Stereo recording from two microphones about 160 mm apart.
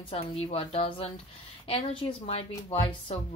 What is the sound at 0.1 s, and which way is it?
Speech, 40° left (ahead or behind).